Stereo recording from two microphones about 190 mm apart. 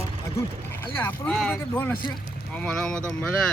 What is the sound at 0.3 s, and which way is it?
Speech, 15° left (ahead or behind).